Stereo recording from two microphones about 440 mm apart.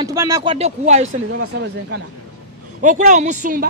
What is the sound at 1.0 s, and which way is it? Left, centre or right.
A woman's voice, right.